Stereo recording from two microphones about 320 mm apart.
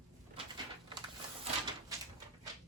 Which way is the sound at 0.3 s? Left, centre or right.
Centre.